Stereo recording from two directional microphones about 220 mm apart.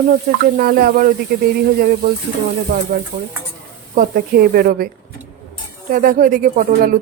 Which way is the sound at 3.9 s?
40° right (ahead or behind).